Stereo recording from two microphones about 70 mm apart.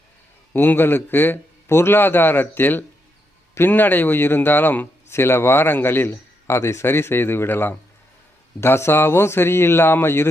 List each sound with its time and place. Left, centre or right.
0.5 s a man's voice: left